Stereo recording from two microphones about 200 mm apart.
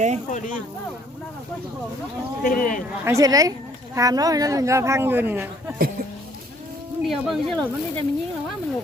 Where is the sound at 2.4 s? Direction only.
45° left (ahead or behind).